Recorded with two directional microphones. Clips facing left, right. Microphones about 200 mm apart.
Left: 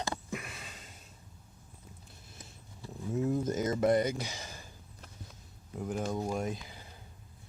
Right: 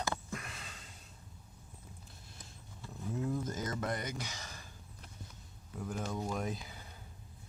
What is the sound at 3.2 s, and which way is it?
Speech, 25° left (ahead or behind).